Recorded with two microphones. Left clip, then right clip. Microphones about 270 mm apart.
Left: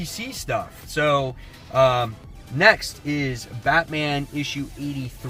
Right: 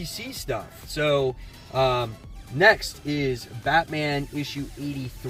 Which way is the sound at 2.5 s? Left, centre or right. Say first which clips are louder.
Left 2 dB; centre.